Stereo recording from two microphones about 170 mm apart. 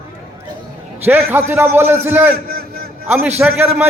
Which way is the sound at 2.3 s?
60° right (ahead or behind).